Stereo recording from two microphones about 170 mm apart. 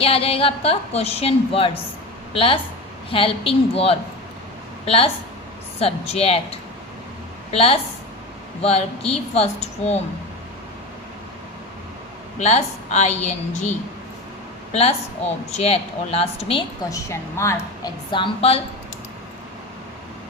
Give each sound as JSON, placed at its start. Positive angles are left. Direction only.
{"t": 0.0, "sound": "a woman's voice", "side_deg": 35}
{"t": 12.4, "sound": "a woman's voice", "side_deg": 40}
{"t": 14.7, "sound": "a woman's voice", "side_deg": 35}
{"t": 16.9, "sound": "a woman's voice", "side_deg": 15}
{"t": 18.1, "sound": "a woman's voice", "side_deg": 30}